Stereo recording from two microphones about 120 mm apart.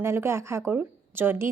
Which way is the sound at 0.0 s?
20° right (ahead or behind).